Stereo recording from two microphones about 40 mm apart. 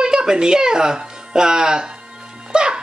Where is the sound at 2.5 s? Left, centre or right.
Right.